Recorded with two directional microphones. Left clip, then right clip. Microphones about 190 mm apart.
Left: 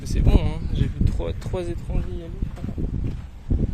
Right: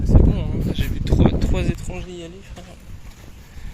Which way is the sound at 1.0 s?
20° left (ahead or behind).